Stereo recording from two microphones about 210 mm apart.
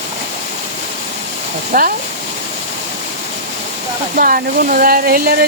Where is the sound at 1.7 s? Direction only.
45° right (ahead or behind).